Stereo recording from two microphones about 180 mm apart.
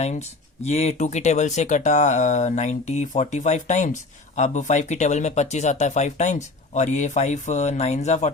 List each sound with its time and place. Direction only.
0.0 s speech: 40° left (ahead or behind)